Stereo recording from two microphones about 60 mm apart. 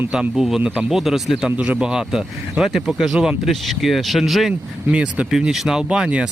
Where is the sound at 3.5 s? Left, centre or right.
Centre.